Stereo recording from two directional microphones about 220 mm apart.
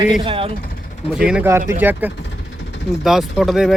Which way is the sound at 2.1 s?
50° left (ahead or behind).